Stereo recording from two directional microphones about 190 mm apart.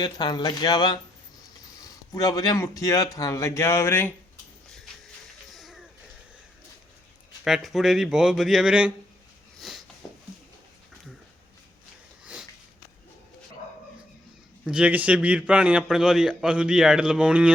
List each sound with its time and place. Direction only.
0.0 s a man's voice: 20° left (ahead or behind)
5.5 s a sound: centre (ahead or behind)
7.4 s a man's voice: centre (ahead or behind)
9.6 s a sound: centre (ahead or behind)
12.2 s sniff: 5° right (ahead or behind)
14.6 s a man's voice: 5° right (ahead or behind)